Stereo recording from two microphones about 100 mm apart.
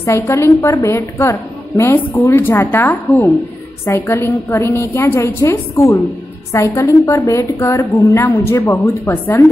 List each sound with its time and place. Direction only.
0.0 s a woman's voice: 25° left (ahead or behind)